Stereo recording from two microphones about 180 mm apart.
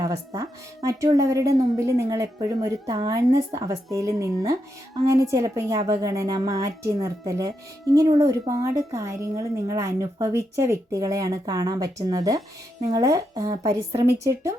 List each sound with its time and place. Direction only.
0.0 s a woman's voice: 20° right (ahead or behind)